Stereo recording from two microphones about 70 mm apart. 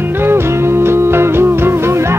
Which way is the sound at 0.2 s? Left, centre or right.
Right.